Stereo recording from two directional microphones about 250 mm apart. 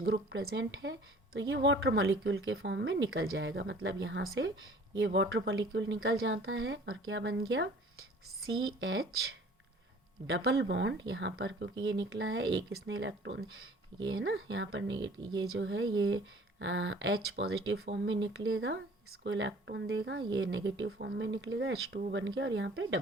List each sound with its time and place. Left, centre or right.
0.0 s a woman's voice: right
10.3 s a woman's voice: right